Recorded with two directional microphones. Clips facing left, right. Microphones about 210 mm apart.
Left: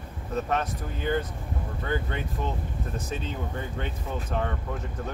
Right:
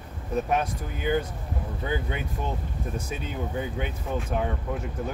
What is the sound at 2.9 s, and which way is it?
Speech, 10° right (ahead or behind).